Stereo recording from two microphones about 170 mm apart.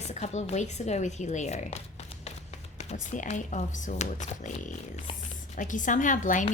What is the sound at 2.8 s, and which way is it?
A woman's voice, 45° left (ahead or behind).